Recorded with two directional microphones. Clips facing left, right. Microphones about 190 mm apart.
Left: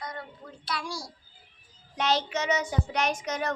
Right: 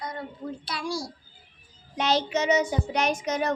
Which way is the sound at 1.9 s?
20° right (ahead or behind).